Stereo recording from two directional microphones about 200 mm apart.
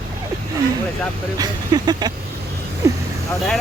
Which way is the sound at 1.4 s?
20° right (ahead or behind).